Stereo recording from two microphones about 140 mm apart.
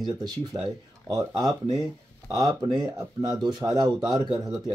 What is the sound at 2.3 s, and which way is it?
A man's voice, 25° right (ahead or behind).